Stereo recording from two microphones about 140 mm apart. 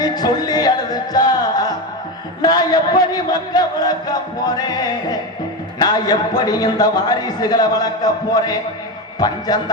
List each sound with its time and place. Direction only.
0.0 s music: 30° left (ahead or behind)
2.4 s a man's voice: 30° left (ahead or behind)